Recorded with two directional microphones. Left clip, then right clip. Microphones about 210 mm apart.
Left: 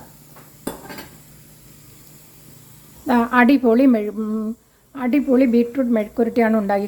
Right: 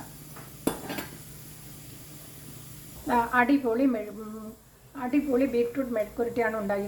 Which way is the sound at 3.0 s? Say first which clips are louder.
Left 7 dB; 45° left (ahead or behind).